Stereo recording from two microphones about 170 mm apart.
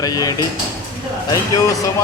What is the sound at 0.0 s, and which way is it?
Speech, 20° left (ahead or behind).